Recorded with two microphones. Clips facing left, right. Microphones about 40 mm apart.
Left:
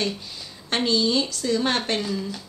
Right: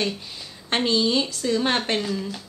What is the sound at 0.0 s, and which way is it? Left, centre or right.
A woman's voice, right.